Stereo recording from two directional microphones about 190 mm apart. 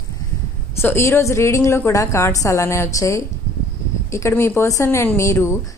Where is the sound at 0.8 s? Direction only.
15° left (ahead or behind).